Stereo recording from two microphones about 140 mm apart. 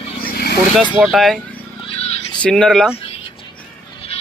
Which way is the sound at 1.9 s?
50° left (ahead or behind).